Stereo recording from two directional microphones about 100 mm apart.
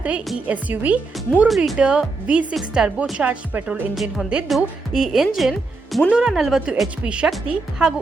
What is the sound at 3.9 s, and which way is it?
A woman's voice, centre (ahead or behind).